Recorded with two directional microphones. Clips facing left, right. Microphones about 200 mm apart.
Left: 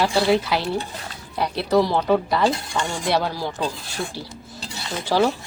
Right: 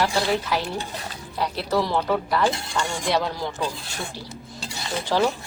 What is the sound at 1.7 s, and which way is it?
Speech, 15° left (ahead or behind).